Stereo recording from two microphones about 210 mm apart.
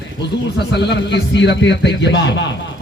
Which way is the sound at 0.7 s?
55° left (ahead or behind).